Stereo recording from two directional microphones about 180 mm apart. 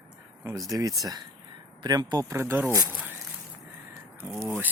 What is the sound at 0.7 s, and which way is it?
Speech, 20° right (ahead or behind).